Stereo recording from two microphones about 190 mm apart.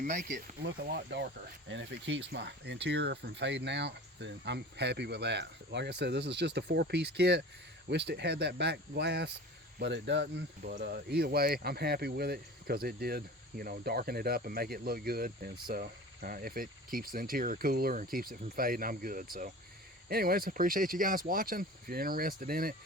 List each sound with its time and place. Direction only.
0.0 s speech: 40° right (ahead or behind)
0.6 s speech: 55° right (ahead or behind)
1.7 s speech: 70° right (ahead or behind); by 22.7 s 50° right (ahead or behind)